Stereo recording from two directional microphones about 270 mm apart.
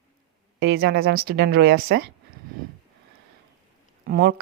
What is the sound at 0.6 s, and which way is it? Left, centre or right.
Speech, right.